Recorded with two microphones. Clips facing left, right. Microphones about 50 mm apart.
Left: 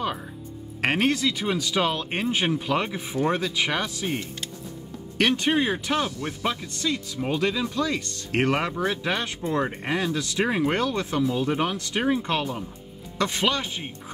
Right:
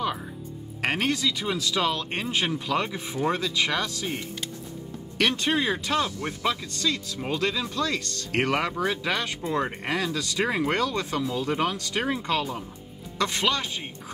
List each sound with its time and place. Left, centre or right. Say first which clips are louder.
0.7 s speech: left 3 dB; centre
5.1 s speech: left 2 dB; left